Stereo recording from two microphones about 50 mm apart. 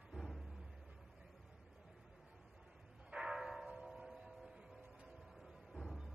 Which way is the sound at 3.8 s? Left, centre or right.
Centre.